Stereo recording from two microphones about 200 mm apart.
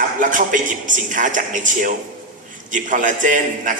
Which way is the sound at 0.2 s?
40° right (ahead or behind).